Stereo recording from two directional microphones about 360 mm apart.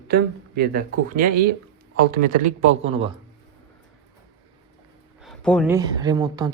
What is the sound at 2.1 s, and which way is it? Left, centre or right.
Speech, right.